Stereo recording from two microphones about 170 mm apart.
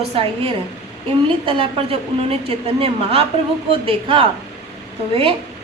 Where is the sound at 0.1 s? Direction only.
35° right (ahead or behind).